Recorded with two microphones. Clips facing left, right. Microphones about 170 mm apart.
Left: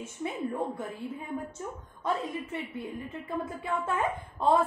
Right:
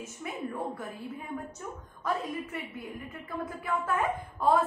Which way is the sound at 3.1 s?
25° left (ahead or behind).